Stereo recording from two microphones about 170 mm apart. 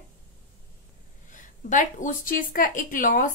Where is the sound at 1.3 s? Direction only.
50° left (ahead or behind).